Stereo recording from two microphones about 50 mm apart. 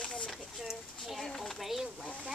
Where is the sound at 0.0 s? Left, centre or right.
Left.